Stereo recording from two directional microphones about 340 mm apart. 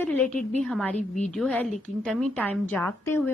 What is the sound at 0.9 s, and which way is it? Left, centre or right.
Speech, left.